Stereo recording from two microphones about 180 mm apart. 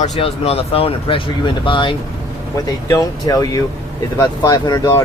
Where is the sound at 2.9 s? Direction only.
20° left (ahead or behind).